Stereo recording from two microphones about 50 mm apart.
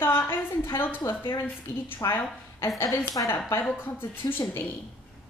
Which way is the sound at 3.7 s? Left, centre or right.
Left.